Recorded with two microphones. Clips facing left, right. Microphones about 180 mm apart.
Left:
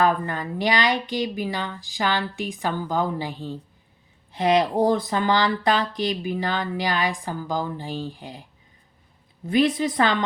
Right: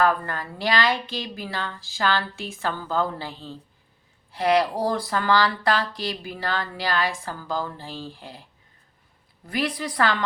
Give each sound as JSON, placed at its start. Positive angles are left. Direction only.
{"t": 0.0, "sound": "speech", "side_deg": 20}
{"t": 9.5, "sound": "a woman's voice", "side_deg": 20}